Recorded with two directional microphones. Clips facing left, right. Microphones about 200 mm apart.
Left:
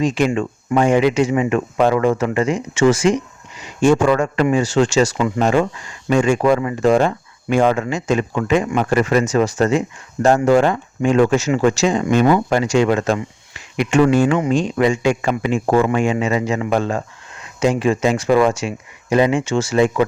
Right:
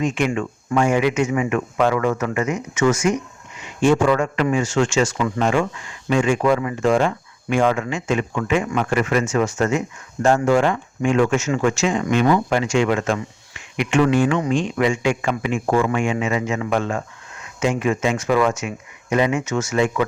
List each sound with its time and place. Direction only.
0.0 s speech: 35° left (ahead or behind)
3.6 s a man's voice: 45° left (ahead or behind); by 12.4 s 25° left (ahead or behind)
12.5 s speech: 40° left (ahead or behind)